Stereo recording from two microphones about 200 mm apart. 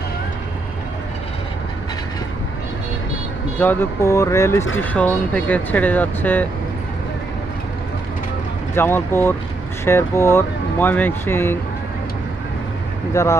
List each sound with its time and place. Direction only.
3.6 s speech: 10° left (ahead or behind)
8.7 s speech: 10° left (ahead or behind)
13.2 s speech: 15° left (ahead or behind)